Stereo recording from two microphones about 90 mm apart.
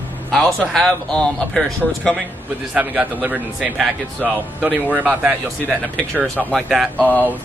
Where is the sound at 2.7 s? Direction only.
15° right (ahead or behind).